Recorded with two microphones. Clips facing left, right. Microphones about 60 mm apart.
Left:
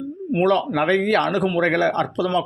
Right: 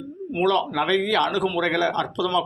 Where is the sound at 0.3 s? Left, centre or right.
Left.